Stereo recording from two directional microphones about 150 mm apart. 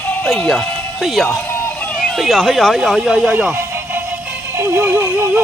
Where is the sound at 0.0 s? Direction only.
10° left (ahead or behind).